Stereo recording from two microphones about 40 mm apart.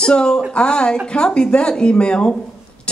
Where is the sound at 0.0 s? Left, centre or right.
Left.